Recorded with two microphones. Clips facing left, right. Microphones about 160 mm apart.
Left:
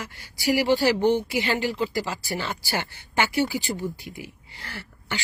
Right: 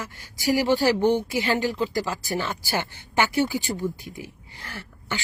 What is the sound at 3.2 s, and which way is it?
Speech, 15° left (ahead or behind).